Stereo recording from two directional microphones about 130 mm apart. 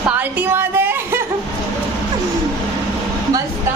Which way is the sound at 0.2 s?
15° right (ahead or behind).